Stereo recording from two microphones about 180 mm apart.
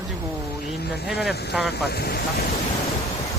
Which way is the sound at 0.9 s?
65° left (ahead or behind).